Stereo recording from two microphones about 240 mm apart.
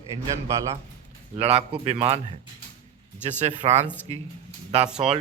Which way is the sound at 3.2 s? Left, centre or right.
Right.